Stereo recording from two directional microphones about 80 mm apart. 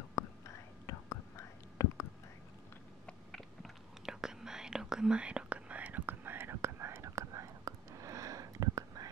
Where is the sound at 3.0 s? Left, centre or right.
Centre.